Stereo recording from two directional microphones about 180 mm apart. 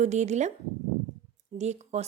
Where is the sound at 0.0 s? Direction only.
40° right (ahead or behind).